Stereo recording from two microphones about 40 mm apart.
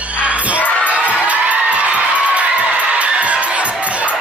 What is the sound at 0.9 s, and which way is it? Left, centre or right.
Crowd, right.